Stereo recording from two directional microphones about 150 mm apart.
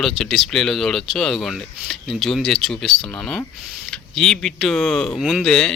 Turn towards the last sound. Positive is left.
turn(degrees=5)  # may be behind; listen again after turning